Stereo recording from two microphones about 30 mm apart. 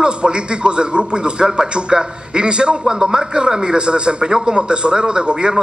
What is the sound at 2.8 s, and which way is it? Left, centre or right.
Speech, right.